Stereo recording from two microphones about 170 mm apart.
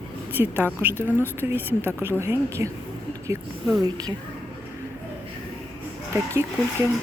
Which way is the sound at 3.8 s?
25° right (ahead or behind).